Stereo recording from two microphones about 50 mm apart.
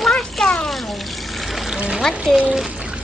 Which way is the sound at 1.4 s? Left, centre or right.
Centre.